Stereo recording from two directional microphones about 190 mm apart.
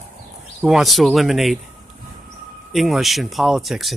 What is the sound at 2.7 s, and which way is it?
Speech, centre (ahead or behind).